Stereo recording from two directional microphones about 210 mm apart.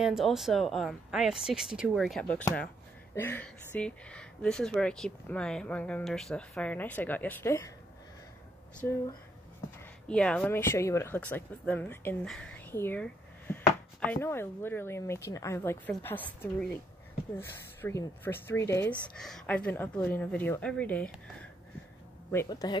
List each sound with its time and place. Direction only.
0.0 s speech: centre (ahead or behind)
10.0 s speech: 5° left (ahead or behind)
22.3 s speech: 15° left (ahead or behind)